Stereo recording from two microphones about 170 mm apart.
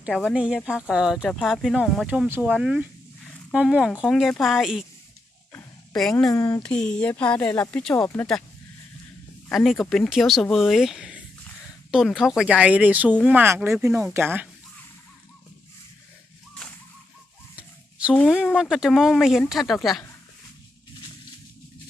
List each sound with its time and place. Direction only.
0.3 s speech: 5° right (ahead or behind)
5.5 s a sound: 5° left (ahead or behind)
6.3 s speech: 20° left (ahead or behind)
6.6 s speech: 5° left (ahead or behind)
9.5 s speech: centre (ahead or behind)
18.1 s speech: 5° left (ahead or behind)
18.3 s speech: 5° right (ahead or behind)